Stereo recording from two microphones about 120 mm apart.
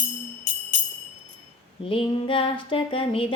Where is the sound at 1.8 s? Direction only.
50° left (ahead or behind).